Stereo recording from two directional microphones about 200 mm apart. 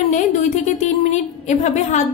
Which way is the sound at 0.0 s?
35° left (ahead or behind).